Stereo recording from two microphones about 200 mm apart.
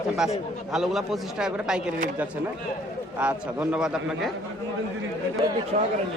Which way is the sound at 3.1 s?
5° right (ahead or behind).